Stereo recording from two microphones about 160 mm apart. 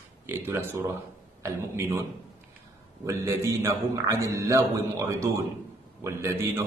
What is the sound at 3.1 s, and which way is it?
A man's voice, 20° right (ahead or behind).